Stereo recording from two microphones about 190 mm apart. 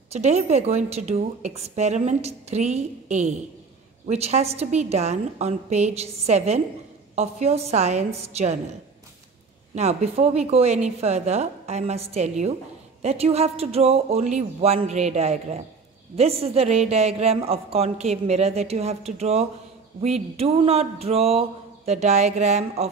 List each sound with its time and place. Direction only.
0.1 s a woman's voice: 35° right (ahead or behind)
9.8 s a woman's voice: 35° right (ahead or behind)